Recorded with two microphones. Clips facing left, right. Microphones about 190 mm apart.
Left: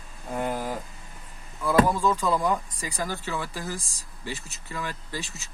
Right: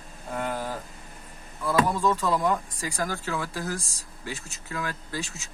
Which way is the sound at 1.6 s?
Centre (ahead or behind).